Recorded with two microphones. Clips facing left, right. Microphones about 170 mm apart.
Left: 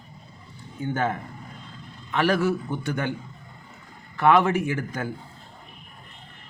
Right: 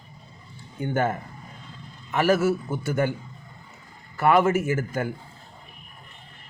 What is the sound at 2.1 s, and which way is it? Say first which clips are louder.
A man's voice: right 2 dB; 5° right (ahead or behind).